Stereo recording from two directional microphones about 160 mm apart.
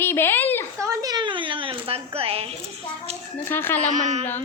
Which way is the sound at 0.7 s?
20° right (ahead or behind).